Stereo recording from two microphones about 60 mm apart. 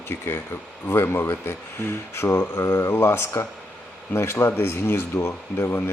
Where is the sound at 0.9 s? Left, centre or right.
Left.